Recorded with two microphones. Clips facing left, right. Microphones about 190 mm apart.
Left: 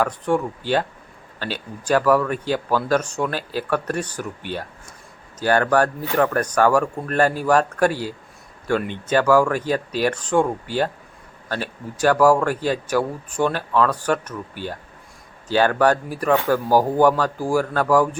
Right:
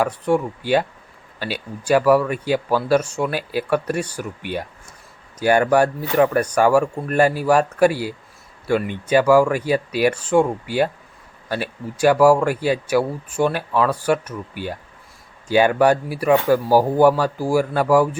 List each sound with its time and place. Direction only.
0.0 s a man's voice: 10° right (ahead or behind)